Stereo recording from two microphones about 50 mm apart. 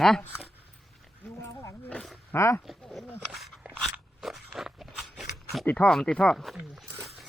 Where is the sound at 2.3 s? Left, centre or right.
Left.